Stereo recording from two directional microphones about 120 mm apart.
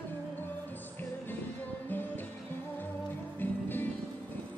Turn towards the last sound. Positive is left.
turn(degrees=15)  # may be behind; listen again after turning